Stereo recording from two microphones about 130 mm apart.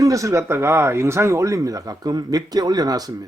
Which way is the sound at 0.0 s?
25° right (ahead or behind).